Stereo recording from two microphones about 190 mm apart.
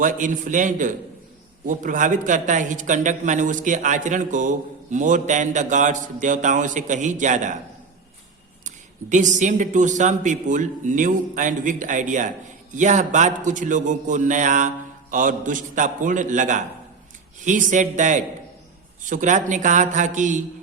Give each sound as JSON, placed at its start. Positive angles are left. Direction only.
{"t": 0.0, "sound": "a man's voice", "side_deg": -45}
{"t": 8.6, "sound": "a man's voice", "side_deg": -40}